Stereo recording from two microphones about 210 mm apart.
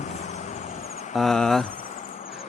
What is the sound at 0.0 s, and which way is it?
Vehicle, 30° left (ahead or behind).